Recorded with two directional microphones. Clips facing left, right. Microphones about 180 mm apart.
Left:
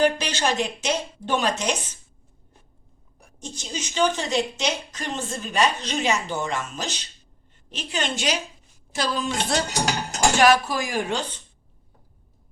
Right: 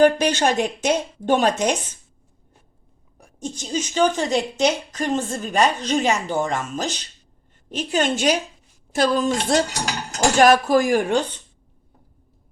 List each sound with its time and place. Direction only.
0.0 s a woman's voice: 55° right (ahead or behind)
3.2 s a woman's voice: 50° right (ahead or behind)